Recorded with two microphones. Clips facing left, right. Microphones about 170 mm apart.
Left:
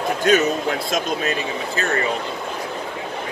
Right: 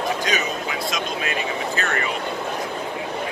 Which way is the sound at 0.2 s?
50° left (ahead or behind).